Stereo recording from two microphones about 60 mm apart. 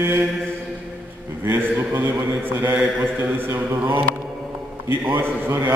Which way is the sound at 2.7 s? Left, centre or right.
Right.